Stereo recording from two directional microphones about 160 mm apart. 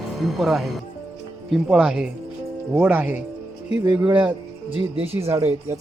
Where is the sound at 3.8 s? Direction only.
25° right (ahead or behind).